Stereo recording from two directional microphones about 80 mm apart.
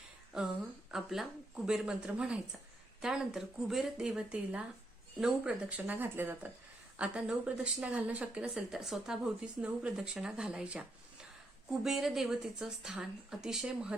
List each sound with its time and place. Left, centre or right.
0.3 s speech: centre; by 6.5 s right
6.9 s speech: centre